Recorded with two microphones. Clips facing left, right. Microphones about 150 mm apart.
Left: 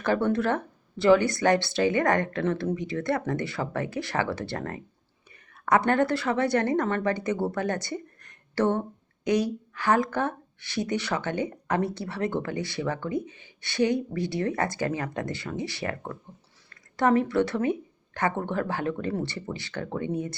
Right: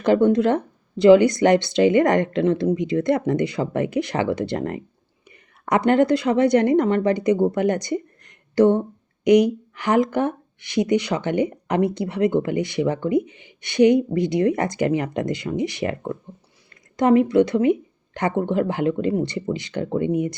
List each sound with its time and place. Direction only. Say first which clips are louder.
0.0 s a woman's voice: right 8 dB; 20° right (ahead or behind)